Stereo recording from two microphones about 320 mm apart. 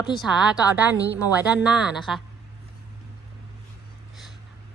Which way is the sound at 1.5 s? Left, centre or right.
Centre.